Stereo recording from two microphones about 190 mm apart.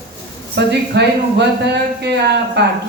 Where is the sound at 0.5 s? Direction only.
60° right (ahead or behind).